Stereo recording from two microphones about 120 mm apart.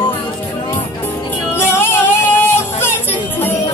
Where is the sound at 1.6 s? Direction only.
20° left (ahead or behind).